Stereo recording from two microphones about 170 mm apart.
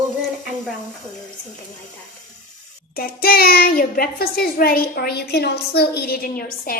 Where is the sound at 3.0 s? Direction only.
65° left (ahead or behind).